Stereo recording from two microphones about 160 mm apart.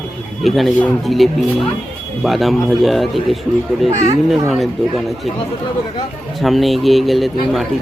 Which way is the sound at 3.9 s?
50° right (ahead or behind).